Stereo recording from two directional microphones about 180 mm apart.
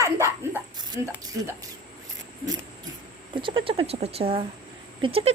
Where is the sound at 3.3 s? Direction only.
30° right (ahead or behind).